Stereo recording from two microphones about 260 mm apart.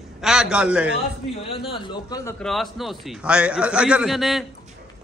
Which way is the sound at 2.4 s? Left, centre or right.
Centre.